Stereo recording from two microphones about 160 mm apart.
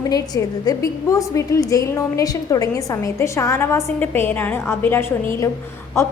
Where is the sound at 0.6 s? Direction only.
20° left (ahead or behind).